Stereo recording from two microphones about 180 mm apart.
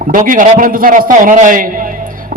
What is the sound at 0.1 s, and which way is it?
A man's voice, 45° right (ahead or behind).